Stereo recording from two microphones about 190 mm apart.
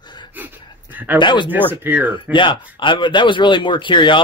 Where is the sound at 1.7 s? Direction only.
10° right (ahead or behind).